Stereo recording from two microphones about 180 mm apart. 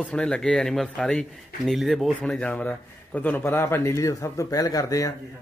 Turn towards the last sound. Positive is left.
turn(degrees=20)  # may be behind; listen again after turning